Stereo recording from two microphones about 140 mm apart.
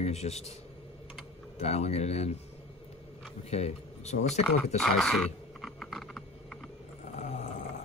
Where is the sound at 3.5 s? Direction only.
50° left (ahead or behind).